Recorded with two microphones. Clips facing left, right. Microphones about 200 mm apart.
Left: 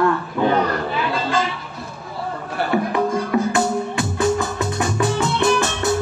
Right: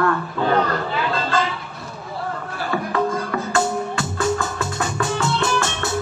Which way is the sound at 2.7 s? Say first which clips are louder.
Left 2 dB; 20° left (ahead or behind).